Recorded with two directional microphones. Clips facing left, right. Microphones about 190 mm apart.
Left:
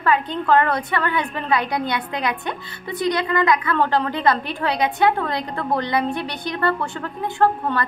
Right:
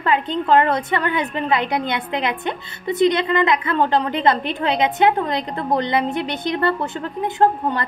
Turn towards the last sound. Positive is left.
turn(degrees=-20)  # may be behind; listen again after turning